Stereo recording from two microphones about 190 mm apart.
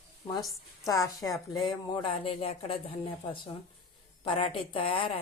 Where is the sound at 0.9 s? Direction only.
20° left (ahead or behind).